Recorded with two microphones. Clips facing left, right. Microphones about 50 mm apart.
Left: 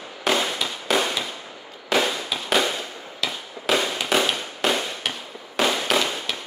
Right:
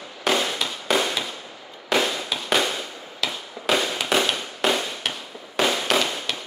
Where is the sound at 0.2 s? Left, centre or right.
Centre.